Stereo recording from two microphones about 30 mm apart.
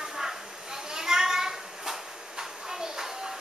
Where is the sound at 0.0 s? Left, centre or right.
Centre.